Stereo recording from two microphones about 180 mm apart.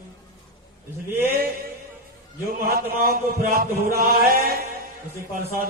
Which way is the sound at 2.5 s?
55° right (ahead or behind).